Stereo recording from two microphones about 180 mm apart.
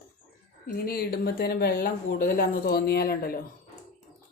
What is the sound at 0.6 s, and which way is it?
Speech, 60° left (ahead or behind).